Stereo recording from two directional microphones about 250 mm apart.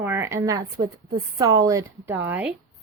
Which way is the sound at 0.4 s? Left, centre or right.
Centre.